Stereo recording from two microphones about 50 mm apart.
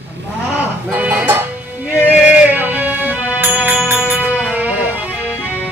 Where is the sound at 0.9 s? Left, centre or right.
Right.